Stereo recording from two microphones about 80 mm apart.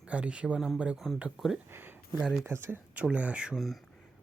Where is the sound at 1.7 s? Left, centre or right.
Right.